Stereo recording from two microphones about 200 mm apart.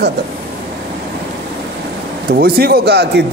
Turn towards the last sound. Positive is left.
turn(degrees=-55)  # may be behind; listen again after turning